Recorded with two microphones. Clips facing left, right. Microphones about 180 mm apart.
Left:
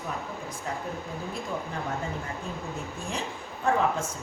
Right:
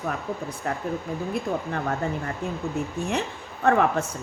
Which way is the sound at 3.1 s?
65° right (ahead or behind).